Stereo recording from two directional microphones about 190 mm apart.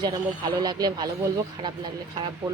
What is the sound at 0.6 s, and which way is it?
Speech, 20° right (ahead or behind).